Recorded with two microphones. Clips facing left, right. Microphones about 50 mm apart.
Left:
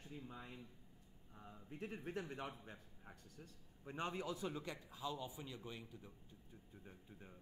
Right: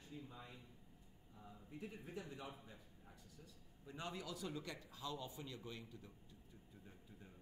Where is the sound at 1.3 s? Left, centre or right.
Left; by 6.1 s centre.